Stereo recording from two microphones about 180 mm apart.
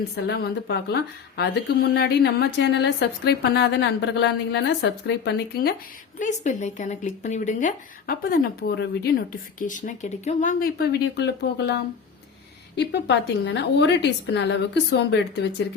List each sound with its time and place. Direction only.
0.3 s a woman's voice: 65° left (ahead or behind)
6.1 s a woman's voice: 45° left (ahead or behind); by 15.6 s 75° left (ahead or behind)